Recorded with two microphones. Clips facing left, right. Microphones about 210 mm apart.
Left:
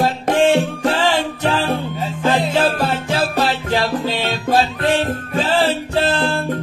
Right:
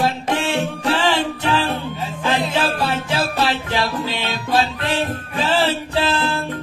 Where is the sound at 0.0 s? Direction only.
45° left (ahead or behind).